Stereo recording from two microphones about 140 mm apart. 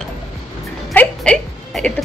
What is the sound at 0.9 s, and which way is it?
Music, 5° left (ahead or behind).